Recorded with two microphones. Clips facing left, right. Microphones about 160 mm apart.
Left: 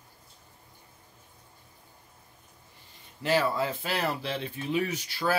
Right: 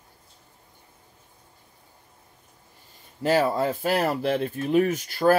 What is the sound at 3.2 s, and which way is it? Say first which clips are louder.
Speech: right 5 dB; 45° right (ahead or behind).